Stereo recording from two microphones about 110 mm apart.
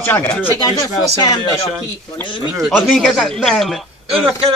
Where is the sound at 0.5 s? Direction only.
35° left (ahead or behind).